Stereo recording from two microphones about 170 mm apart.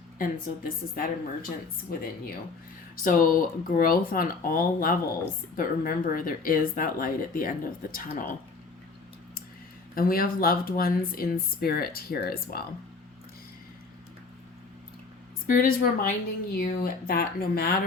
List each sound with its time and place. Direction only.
0.2 s speech: 55° left (ahead or behind)
9.9 s speech: 60° left (ahead or behind)
15.4 s speech: 55° left (ahead or behind)